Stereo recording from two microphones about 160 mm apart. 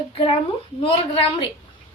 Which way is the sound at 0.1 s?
35° left (ahead or behind).